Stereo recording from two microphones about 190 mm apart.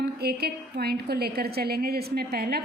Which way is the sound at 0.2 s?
55° right (ahead or behind).